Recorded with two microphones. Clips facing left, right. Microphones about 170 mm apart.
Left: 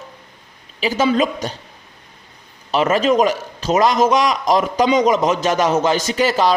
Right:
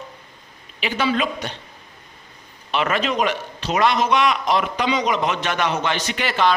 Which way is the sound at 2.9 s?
40° left (ahead or behind).